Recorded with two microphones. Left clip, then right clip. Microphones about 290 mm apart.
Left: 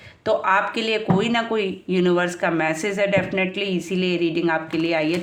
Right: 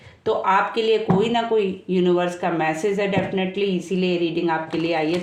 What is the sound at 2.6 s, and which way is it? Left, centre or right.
Speech, left.